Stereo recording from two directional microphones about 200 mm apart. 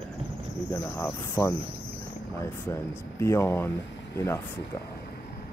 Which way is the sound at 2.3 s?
15° left (ahead or behind).